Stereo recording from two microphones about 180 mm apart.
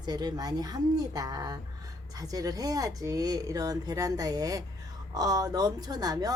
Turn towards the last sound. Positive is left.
turn(degrees=-20)  # may be behind; listen again after turning